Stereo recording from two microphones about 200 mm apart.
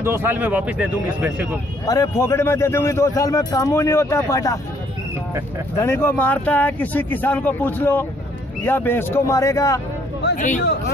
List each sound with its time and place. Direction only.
0.0 s speech: 10° right (ahead or behind)
1.9 s a man's voice: 15° left (ahead or behind)
5.8 s a man's voice: 10° left (ahead or behind)
10.3 s speech: 40° left (ahead or behind)